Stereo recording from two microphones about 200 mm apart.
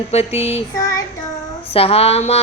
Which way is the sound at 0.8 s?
15° left (ahead or behind).